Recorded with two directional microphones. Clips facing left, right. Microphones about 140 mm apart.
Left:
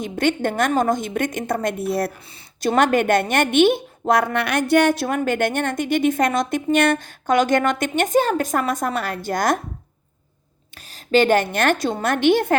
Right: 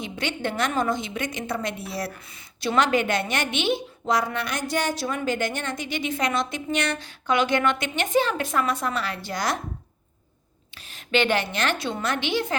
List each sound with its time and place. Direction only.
0.0 s a woman's voice: 50° left (ahead or behind)
10.8 s a woman's voice: 40° left (ahead or behind)